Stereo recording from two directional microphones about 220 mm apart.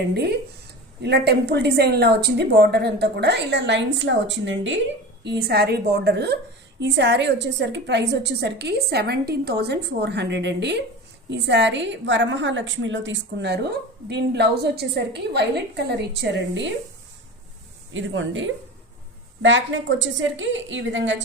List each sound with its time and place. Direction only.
0.1 s a woman's voice: 50° right (ahead or behind)
17.9 s a woman's voice: 60° right (ahead or behind)